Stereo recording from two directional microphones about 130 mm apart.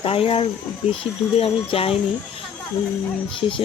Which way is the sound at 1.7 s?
45° left (ahead or behind).